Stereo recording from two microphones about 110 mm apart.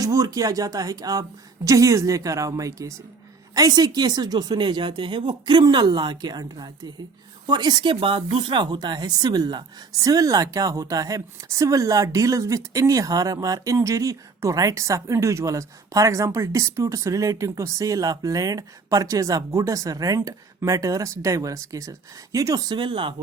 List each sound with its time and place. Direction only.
0.0 s speech: 30° right (ahead or behind)
7.9 s speech: 60° right (ahead or behind)